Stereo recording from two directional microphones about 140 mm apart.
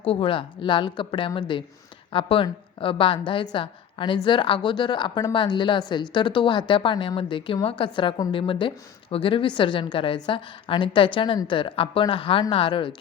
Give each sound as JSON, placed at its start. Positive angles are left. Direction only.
{"t": 0.0, "sound": "a woman's voice", "side_deg": 40}